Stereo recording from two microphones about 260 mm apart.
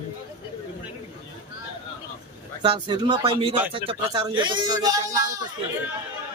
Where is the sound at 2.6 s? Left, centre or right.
Centre.